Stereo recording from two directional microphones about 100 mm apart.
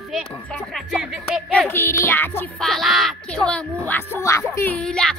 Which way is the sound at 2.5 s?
Centre (ahead or behind).